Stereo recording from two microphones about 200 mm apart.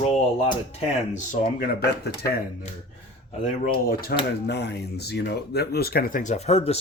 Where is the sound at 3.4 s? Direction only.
35° left (ahead or behind).